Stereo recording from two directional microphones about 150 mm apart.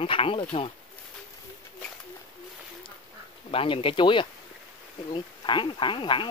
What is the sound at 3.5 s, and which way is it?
Speech, 35° left (ahead or behind).